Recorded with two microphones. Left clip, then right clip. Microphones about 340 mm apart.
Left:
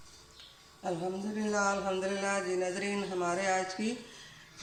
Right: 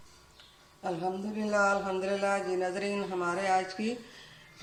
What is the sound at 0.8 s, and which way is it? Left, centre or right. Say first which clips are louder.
Speech: right 2 dB; centre.